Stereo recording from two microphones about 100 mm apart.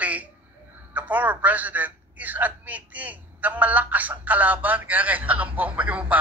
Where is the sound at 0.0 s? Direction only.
15° right (ahead or behind).